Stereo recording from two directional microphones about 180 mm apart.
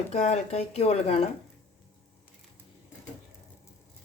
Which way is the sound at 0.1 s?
40° left (ahead or behind).